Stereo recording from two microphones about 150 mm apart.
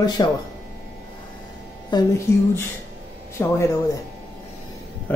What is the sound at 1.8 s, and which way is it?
Speech, 30° left (ahead or behind).